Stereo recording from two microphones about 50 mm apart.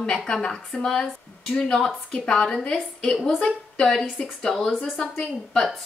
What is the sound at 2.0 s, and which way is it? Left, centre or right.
A woman's voice, left.